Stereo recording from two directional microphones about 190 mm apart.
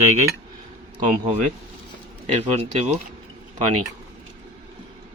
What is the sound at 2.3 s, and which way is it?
Speech, 35° right (ahead or behind).